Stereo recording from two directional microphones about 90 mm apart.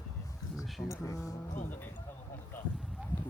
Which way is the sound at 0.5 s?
5° right (ahead or behind).